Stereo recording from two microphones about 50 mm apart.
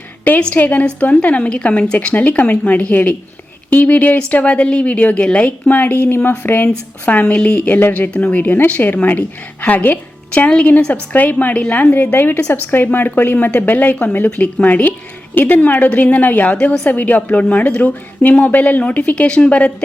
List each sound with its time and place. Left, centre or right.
0.5 s a woman's voice: left
7.0 s a woman's voice: left